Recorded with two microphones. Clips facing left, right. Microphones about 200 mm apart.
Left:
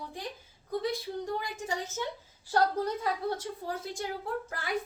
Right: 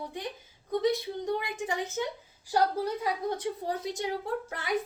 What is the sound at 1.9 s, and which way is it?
A woman's voice, 15° right (ahead or behind).